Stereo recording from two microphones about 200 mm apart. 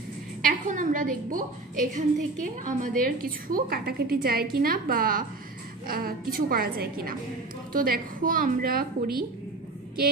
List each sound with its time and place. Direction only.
0.4 s a woman's voice: 45° right (ahead or behind)